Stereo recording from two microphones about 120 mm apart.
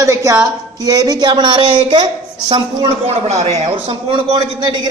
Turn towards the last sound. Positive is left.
turn(degrees=-45)  # may be behind; listen again after turning